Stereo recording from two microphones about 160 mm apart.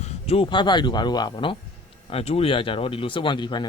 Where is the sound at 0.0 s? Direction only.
40° left (ahead or behind).